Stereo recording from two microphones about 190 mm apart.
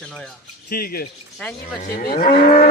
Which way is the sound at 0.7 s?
50° left (ahead or behind).